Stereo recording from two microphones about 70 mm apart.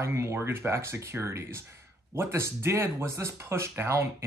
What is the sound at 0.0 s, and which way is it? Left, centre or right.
Speech, right.